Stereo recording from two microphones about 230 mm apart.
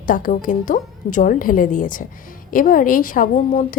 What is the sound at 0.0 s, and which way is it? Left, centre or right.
A woman's voice, left.